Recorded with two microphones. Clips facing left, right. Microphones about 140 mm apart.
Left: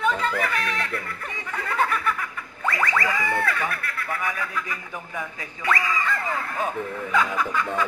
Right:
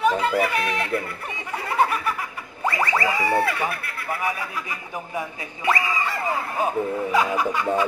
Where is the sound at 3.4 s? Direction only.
15° right (ahead or behind).